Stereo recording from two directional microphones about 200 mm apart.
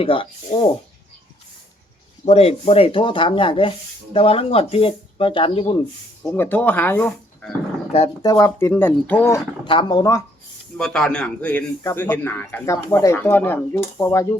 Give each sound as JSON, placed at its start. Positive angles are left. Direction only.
{"t": 0.0, "sound": "speech", "side_deg": 25}
{"t": 2.2, "sound": "speech", "side_deg": 30}
{"t": 6.3, "sound": "speech", "side_deg": 10}
{"t": 9.6, "sound": "speech", "side_deg": 20}
{"t": 10.8, "sound": "speech", "side_deg": 5}